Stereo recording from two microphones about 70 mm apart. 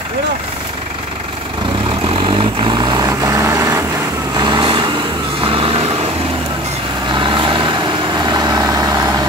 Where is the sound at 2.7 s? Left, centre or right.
Right.